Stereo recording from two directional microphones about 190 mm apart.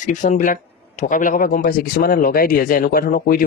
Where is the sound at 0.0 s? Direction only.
40° left (ahead or behind).